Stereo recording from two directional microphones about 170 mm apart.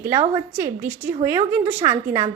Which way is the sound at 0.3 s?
15° right (ahead or behind).